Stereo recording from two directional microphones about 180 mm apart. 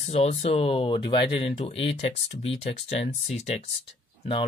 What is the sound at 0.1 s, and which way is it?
Speech, 35° left (ahead or behind).